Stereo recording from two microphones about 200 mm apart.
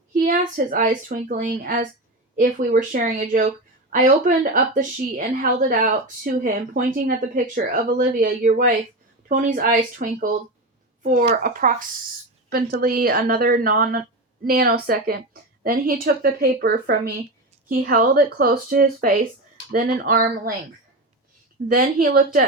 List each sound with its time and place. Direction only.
0.1 s a woman's voice: 40° right (ahead or behind)
21.7 s a woman's voice: 45° right (ahead or behind)